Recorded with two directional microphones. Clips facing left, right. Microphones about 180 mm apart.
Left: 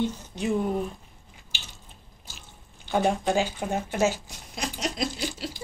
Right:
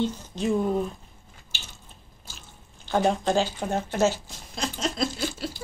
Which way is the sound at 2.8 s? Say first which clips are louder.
Right 1 dB; 15° left (ahead or behind).